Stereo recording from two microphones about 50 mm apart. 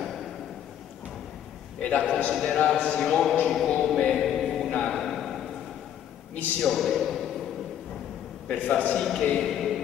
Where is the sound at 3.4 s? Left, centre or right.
Centre.